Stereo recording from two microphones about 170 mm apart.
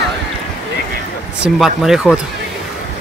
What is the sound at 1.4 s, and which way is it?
Speech, centre (ahead or behind).